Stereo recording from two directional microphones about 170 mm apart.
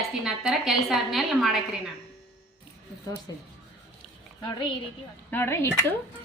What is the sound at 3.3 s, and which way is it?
Speech, 25° left (ahead or behind).